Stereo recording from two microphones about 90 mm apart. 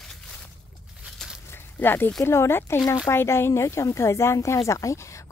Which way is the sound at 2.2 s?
30° left (ahead or behind).